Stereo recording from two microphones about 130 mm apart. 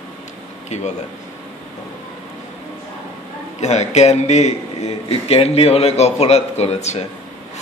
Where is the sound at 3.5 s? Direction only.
60° left (ahead or behind).